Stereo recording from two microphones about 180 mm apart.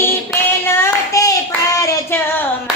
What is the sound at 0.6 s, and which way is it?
Hands, 15° left (ahead or behind).